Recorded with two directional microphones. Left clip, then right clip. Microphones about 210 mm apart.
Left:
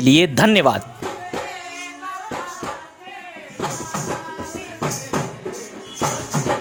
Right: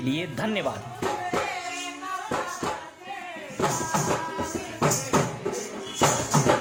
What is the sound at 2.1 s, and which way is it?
Hands, centre (ahead or behind).